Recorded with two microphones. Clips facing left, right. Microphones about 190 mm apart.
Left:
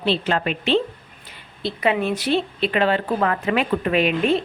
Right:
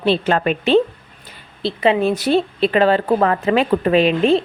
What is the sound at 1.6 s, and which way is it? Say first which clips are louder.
Speech: right 5 dB; 30° right (ahead or behind).